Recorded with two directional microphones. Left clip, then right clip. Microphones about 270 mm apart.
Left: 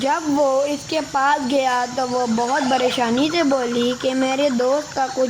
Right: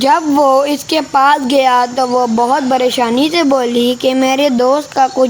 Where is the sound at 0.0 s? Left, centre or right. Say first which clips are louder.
Right 8 dB; right.